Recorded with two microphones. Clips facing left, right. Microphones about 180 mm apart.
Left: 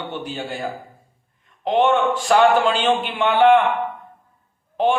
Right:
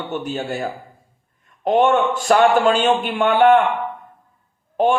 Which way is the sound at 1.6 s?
45° right (ahead or behind).